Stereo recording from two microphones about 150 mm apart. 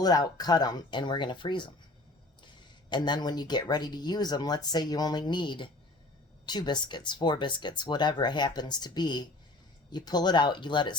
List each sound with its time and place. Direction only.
0.0 s speech: 25° left (ahead or behind)
2.9 s speech: 30° left (ahead or behind)